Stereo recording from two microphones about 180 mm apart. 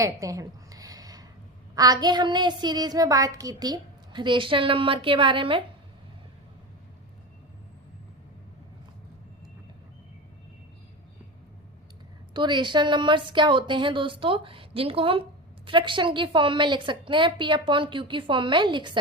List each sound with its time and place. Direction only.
0.0 s a sound: 20° right (ahead or behind)
1.7 s a woman's voice: 20° right (ahead or behind)
12.3 s a woman's voice: 25° right (ahead or behind)